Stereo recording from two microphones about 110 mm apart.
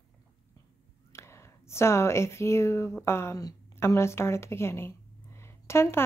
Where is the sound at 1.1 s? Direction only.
25° left (ahead or behind).